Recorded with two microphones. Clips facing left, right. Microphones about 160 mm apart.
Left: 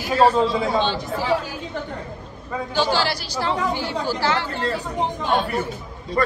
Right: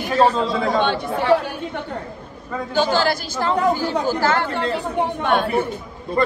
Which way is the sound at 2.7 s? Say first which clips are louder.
Right 3 dB; 45° right (ahead or behind).